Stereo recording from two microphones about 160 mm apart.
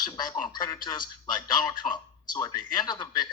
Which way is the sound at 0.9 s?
30° left (ahead or behind).